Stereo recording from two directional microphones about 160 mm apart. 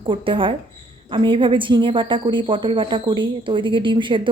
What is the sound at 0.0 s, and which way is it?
A woman's voice, 30° right (ahead or behind).